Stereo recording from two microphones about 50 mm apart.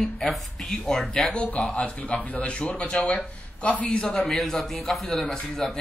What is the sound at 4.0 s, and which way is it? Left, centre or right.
A man's voice, centre.